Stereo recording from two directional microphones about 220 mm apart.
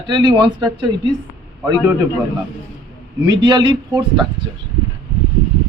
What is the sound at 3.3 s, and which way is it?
Speech, 20° right (ahead or behind).